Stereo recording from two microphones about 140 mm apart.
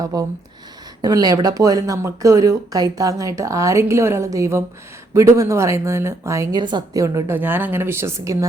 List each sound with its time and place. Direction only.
0.0 s speech: 25° right (ahead or behind)
6.6 s speech: 30° right (ahead or behind)